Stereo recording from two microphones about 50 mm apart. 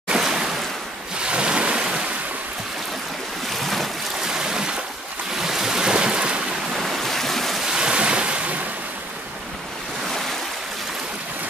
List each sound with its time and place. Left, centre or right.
0.1 s waves: centre
1.2 s waves: right
3.6 s boat: centre
4.3 s boat: centre
5.3 s waves: centre
6.8 s stream: centre
7.6 s waves: centre